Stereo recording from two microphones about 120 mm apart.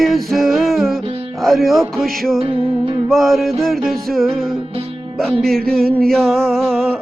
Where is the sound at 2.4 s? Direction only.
50° right (ahead or behind).